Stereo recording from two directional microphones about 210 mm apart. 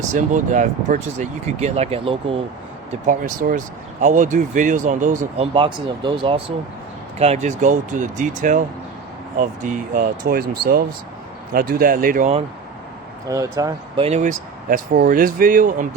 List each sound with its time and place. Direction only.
0.1 s speech: 35° right (ahead or behind)
2.9 s speech: 40° right (ahead or behind)
5.5 s speech: 20° right (ahead or behind); by 12.3 s 40° right (ahead or behind)
13.2 s speech: 15° right (ahead or behind); by 15.9 s 40° right (ahead or behind)